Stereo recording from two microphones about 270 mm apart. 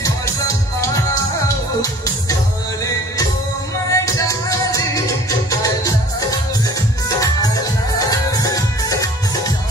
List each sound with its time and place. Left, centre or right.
0.0 s music: centre
3.9 s music: centre